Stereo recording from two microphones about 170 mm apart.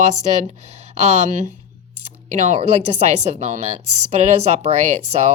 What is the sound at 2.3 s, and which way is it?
Speech, 40° right (ahead or behind).